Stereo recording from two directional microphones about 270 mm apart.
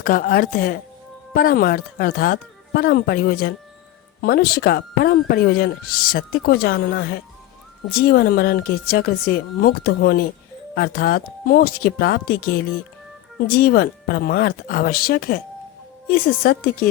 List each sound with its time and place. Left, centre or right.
0.0 s speech: left